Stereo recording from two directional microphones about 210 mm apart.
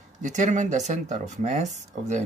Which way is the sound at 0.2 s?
35° right (ahead or behind).